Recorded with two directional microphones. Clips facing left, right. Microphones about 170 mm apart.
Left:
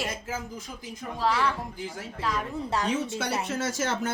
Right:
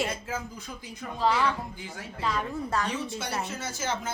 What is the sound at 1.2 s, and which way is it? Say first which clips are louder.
Speech: right 1 dB; centre (ahead or behind).